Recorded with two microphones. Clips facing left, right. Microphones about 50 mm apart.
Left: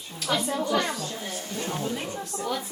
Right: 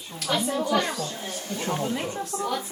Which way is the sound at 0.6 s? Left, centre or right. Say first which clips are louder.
Right 2 dB; centre.